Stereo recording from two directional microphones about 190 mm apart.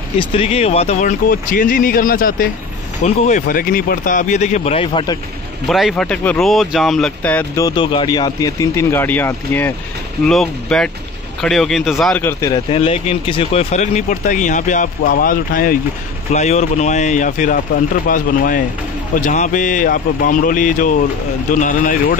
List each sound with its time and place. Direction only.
0.2 s speech: 30° left (ahead or behind)
5.7 s speech: centre (ahead or behind)
7.6 s speech: 25° left (ahead or behind); by 12.2 s centre (ahead or behind)
12.2 s speech: 15° left (ahead or behind)
12.7 s speech: 30° left (ahead or behind); by 15.8 s 45° left (ahead or behind)
16.3 s speech: 35° left (ahead or behind)